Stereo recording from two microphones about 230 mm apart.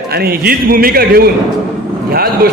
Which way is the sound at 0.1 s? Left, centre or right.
Right.